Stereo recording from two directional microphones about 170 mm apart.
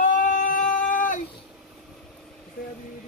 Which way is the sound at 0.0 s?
50° left (ahead or behind).